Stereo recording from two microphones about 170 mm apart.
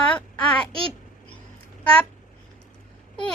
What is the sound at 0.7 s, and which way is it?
Speech, 30° right (ahead or behind).